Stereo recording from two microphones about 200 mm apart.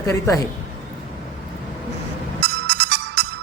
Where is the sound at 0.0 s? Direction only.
15° left (ahead or behind).